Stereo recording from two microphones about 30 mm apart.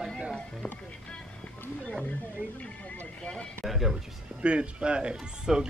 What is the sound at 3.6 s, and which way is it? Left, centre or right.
Speech, centre.